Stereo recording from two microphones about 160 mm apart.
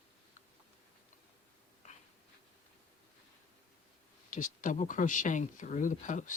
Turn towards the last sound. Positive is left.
turn(degrees=50)  # may be behind; listen again after turning